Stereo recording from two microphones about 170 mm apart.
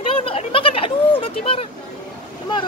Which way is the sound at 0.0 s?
35° left (ahead or behind).